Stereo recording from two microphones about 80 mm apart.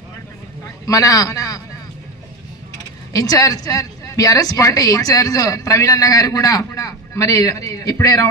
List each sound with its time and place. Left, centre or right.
0.8 s a woman's voice: left
3.1 s a woman's voice: left